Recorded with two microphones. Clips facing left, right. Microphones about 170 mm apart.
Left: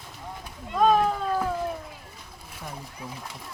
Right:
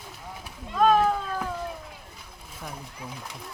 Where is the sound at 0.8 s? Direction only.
Centre (ahead or behind).